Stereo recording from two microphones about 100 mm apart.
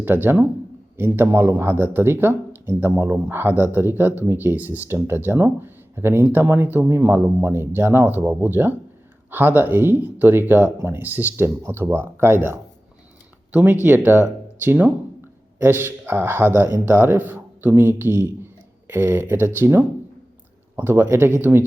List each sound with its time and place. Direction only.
0.0 s speech: 20° right (ahead or behind)